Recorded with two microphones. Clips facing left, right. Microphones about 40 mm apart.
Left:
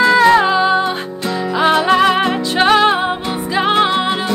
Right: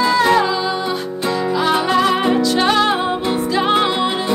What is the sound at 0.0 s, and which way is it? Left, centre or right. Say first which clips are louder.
Music: left 5 dB; left.